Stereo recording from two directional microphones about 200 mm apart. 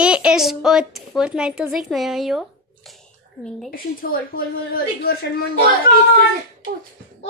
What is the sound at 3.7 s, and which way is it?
A woman's voice, 45° left (ahead or behind).